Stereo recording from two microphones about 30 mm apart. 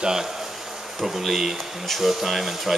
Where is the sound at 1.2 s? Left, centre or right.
Centre.